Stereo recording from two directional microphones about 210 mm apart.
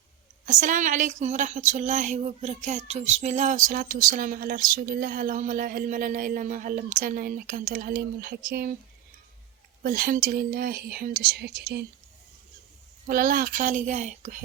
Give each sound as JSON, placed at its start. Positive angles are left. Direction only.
{"t": 0.4, "sound": "speech", "side_deg": -35}
{"t": 9.8, "sound": "speech", "side_deg": -40}
{"t": 13.1, "sound": "speech", "side_deg": -40}